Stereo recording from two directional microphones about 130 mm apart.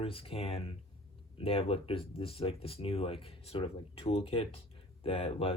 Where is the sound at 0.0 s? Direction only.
45° left (ahead or behind).